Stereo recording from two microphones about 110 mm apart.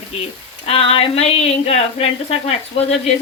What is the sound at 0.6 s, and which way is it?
Speech, 60° left (ahead or behind).